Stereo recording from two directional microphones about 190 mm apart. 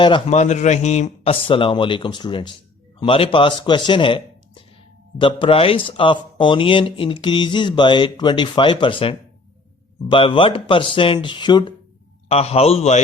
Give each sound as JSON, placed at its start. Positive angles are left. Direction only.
{"t": 0.0, "sound": "speech", "side_deg": 25}
{"t": 0.3, "sound": "a man's voice", "side_deg": 40}